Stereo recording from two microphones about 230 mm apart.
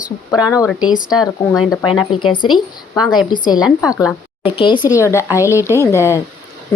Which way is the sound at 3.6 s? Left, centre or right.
Centre.